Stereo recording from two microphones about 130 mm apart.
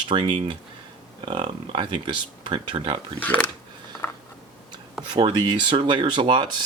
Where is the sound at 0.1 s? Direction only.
40° right (ahead or behind).